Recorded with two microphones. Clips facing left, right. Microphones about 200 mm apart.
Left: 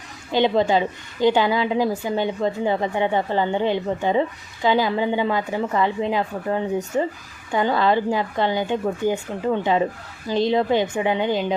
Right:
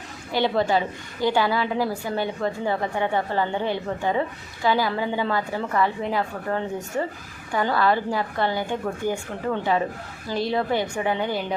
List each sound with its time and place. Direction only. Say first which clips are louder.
0.3 s a woman's voice: left 3 dB; 20° left (ahead or behind)